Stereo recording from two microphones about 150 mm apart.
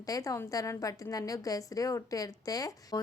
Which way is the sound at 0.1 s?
20° left (ahead or behind).